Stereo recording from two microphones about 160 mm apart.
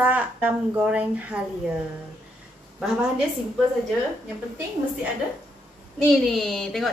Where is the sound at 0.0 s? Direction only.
10° right (ahead or behind).